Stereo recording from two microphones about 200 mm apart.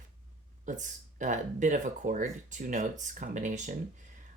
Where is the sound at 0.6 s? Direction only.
40° right (ahead or behind).